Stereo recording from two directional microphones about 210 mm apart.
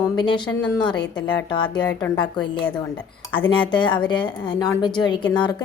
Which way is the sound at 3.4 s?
25° left (ahead or behind).